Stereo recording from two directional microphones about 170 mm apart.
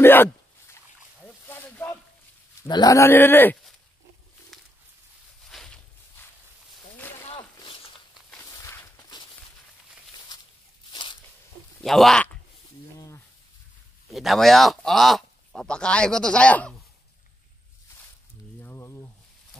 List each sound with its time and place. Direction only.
0.0 s speech: 10° left (ahead or behind)
1.2 s a sound: 10° left (ahead or behind)
2.7 s speech: 20° left (ahead or behind)
4.5 s bird: centre (ahead or behind)
5.5 s walk: centre (ahead or behind)
7.0 s a sound: 10° left (ahead or behind)
7.2 s a sound: 30° left (ahead or behind)
8.4 s walk: 20° left (ahead or behind)
10.9 s crunch: 30° left (ahead or behind)
11.8 s speech: centre (ahead or behind)
14.1 s speech: centre (ahead or behind)
18.6 s a sound: 15° left (ahead or behind)